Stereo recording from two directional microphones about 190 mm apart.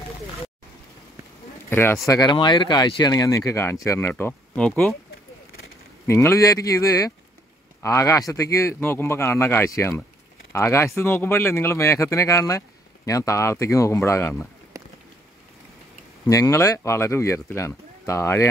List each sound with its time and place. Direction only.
1.7 s speech: 15° left (ahead or behind)
6.0 s speech: 15° left (ahead or behind)
14.7 s a sound: 15° right (ahead or behind)
16.3 s speech: 15° left (ahead or behind)